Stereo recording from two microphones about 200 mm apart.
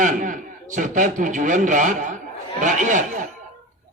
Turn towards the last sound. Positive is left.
turn(degrees=-40)  # may be behind; listen again after turning